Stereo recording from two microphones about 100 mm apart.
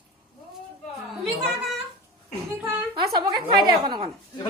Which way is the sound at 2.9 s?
45° right (ahead or behind).